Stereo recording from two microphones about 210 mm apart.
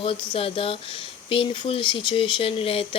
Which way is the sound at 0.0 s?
25° left (ahead or behind).